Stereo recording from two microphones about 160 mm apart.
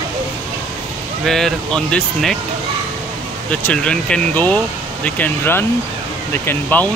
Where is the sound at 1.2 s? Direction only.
5° left (ahead or behind).